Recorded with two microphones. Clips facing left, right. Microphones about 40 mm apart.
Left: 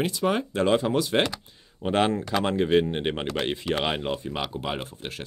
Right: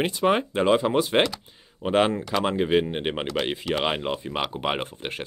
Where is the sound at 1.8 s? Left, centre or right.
Centre.